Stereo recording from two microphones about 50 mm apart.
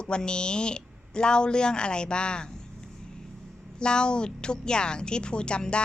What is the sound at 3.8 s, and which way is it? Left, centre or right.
A woman's voice, centre.